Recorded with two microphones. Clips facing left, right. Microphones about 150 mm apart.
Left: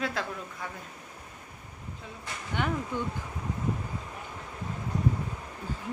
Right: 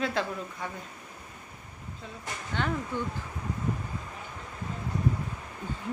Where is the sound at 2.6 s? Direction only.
15° left (ahead or behind).